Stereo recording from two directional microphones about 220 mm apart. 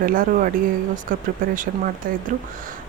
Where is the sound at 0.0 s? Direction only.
40° right (ahead or behind).